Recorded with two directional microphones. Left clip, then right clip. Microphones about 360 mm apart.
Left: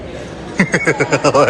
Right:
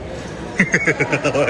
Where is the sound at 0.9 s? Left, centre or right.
Left.